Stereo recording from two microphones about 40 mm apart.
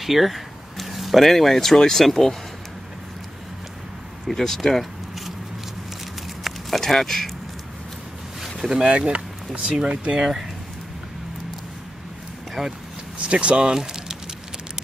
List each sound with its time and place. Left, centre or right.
0.0 s speech: centre
4.3 s speech: centre
6.5 s a sound: centre
6.8 s speech: centre
8.4 s a sound: centre
8.8 s speech: right
10.2 s speech: centre
12.6 s speech: centre
13.2 s speech: right
13.7 s a sound: centre